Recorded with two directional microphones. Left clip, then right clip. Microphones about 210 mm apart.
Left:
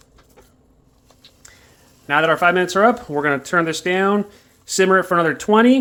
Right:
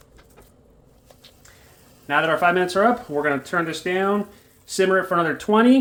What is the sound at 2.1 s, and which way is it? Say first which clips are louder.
Speech: left 3 dB; 30° left (ahead or behind).